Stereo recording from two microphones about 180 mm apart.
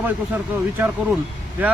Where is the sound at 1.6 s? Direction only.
10° right (ahead or behind).